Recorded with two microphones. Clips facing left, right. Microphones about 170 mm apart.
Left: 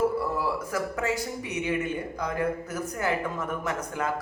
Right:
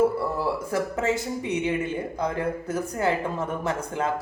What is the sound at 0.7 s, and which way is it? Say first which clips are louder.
Speech: right 4 dB; 25° right (ahead or behind).